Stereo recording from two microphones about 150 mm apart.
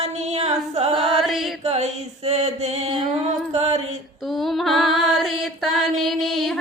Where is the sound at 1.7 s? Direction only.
45° right (ahead or behind).